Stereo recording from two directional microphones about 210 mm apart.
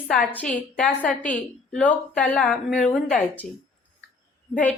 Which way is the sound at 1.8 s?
5° left (ahead or behind).